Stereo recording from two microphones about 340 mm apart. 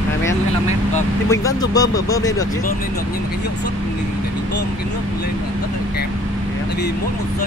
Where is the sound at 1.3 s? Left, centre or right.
Centre.